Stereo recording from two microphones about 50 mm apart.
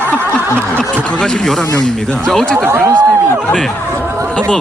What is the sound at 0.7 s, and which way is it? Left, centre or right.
A man's voice, centre.